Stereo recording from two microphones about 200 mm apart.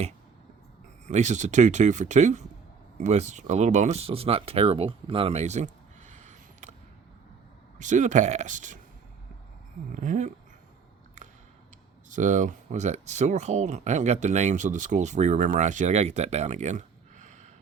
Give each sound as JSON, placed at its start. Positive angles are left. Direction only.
{"t": 1.0, "sound": "speech", "side_deg": -35}
{"t": 7.8, "sound": "speech", "side_deg": -40}
{"t": 9.9, "sound": "speech", "side_deg": -40}
{"t": 12.1, "sound": "speech", "side_deg": -40}